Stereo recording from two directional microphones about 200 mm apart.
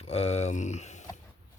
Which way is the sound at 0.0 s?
30° left (ahead or behind).